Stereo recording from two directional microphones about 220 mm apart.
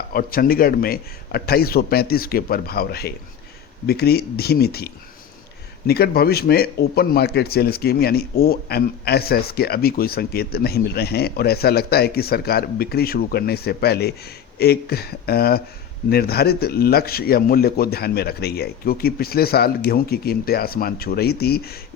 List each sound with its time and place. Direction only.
0.1 s speech: 40° left (ahead or behind)